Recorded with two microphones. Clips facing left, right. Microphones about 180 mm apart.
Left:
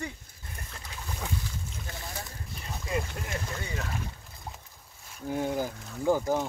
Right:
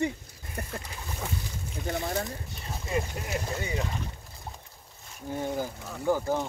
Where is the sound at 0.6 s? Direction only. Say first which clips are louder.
Right 11 dB; 65° right (ahead or behind).